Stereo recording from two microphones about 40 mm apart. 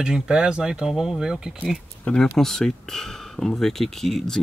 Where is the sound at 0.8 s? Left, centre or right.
Centre.